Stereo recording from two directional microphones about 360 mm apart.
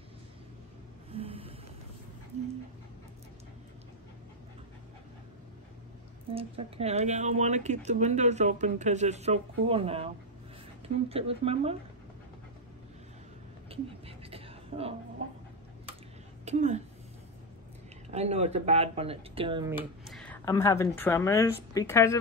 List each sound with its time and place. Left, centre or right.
1.1 s vehicle: centre
6.3 s speech: centre
13.7 s a sound: centre
16.4 s a woman's voice: centre
18.1 s speech: centre